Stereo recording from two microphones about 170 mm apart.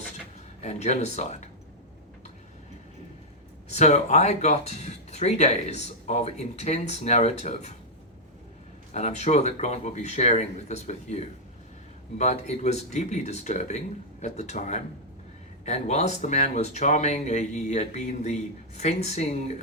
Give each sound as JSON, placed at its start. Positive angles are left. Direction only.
{"t": 0.6, "sound": "speech", "side_deg": 40}
{"t": 3.7, "sound": "speech", "side_deg": 45}
{"t": 8.9, "sound": "speech", "side_deg": 40}